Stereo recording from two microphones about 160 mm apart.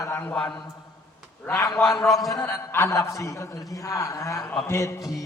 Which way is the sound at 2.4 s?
15° left (ahead or behind).